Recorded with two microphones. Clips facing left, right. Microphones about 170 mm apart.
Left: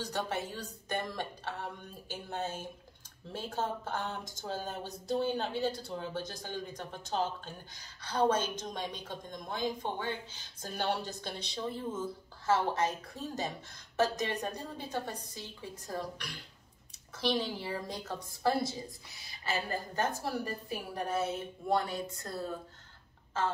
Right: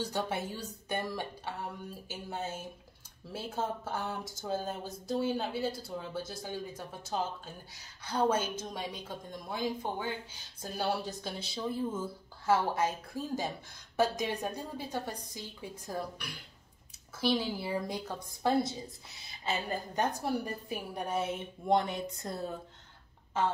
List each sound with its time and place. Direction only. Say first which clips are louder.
0.0 s a woman's voice: right 1 dB; 10° right (ahead or behind)
3.3 s a sound: even; 5° right (ahead or behind)
10.6 s a woman's voice: right 1 dB; 5° right (ahead or behind)
20.0 s a woman's voice: right 2 dB; 15° right (ahead or behind)